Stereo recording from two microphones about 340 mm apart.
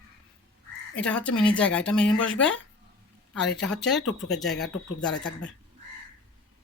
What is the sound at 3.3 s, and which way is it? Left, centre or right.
Speech, centre.